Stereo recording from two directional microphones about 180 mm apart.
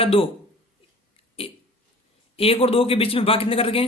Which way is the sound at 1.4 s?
35° left (ahead or behind).